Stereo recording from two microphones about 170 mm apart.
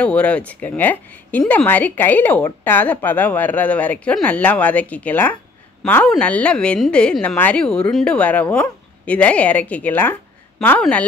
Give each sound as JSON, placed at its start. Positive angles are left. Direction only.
{"t": 0.0, "sound": "speech", "side_deg": 5}